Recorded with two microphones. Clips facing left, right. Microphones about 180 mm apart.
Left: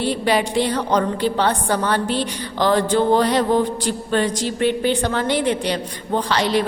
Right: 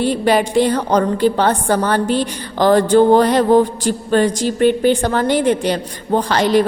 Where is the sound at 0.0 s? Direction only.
45° right (ahead or behind).